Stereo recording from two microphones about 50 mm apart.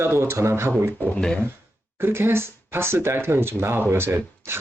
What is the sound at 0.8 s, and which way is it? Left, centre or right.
Speech, right.